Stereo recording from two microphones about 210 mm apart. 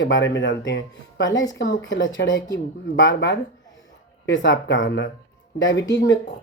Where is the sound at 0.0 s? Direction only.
55° left (ahead or behind).